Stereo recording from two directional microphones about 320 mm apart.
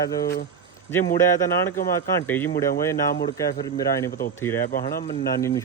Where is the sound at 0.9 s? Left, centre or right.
Centre.